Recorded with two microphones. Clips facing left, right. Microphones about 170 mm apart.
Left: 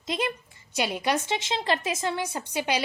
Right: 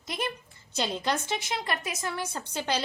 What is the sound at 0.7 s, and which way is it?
A woman's voice, 10° left (ahead or behind).